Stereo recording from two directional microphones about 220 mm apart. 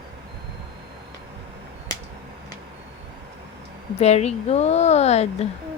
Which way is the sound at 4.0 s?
30° left (ahead or behind).